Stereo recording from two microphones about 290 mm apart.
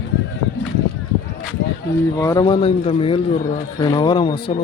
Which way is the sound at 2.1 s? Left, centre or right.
Centre.